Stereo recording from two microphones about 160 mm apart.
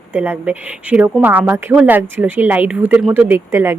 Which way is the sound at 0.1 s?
10° right (ahead or behind).